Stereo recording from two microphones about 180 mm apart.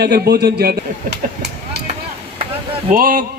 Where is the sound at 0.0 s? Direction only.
65° right (ahead or behind).